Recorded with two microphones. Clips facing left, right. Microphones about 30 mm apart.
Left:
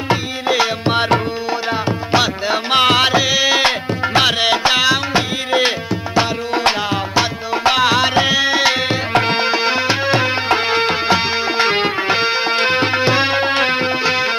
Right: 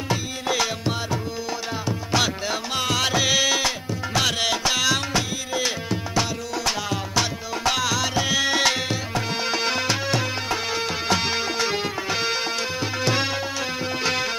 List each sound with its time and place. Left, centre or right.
0.1 s music: left
0.9 s tabla: left
1.7 s music: left
2.7 s music: left
3.2 s music: left
3.5 s music: left
8.3 s music: left
9.1 s music: left
9.5 s music: left
11.5 s music: left
14.0 s music: left